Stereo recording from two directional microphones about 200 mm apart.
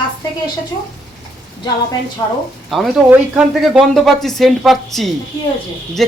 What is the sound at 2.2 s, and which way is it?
Speech, 20° left (ahead or behind).